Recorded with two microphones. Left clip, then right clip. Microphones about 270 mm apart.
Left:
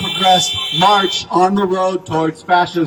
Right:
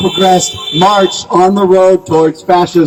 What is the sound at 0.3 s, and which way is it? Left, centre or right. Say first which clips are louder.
Speech: right 1 dB; centre.